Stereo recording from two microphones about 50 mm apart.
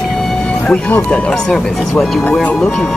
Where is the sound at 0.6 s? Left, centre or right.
Left.